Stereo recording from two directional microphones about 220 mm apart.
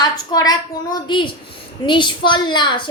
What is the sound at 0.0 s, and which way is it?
A woman's voice, 20° left (ahead or behind).